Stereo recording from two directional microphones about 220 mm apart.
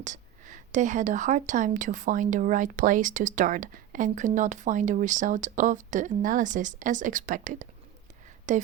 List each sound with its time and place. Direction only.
0.0 s a woman's voice: 35° right (ahead or behind)